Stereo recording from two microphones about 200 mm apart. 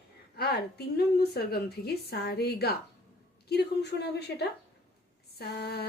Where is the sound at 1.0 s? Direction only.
50° left (ahead or behind).